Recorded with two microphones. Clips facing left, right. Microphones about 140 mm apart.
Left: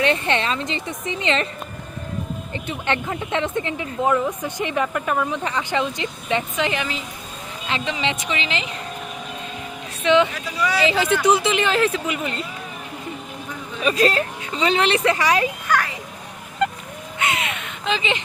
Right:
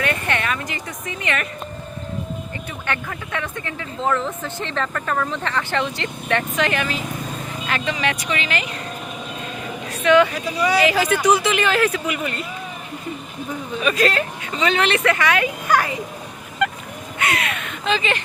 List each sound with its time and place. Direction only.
0.0 s speech: 25° left (ahead or behind)
2.6 s speech: 25° left (ahead or behind)
10.0 s speech: 25° left (ahead or behind)
13.8 s speech: 30° left (ahead or behind)
15.7 s a child's voice: 15° right (ahead or behind)
17.2 s speech: 20° left (ahead or behind)